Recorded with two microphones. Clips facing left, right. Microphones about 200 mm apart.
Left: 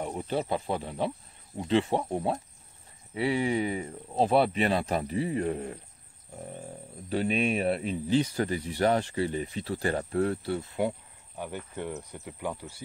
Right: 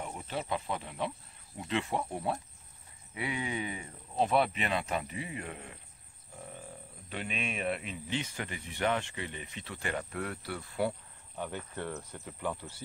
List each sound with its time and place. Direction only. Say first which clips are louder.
0.0 s speech: left 7 dB; 35° left (ahead or behind)
7.1 s speech: left 11 dB; 35° left (ahead or behind); by 12.8 s 10° left (ahead or behind)